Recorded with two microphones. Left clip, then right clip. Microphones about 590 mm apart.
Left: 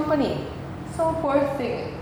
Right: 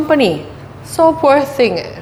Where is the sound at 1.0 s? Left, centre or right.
Right.